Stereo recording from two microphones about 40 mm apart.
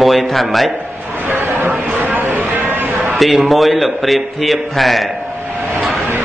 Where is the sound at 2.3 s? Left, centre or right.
Right.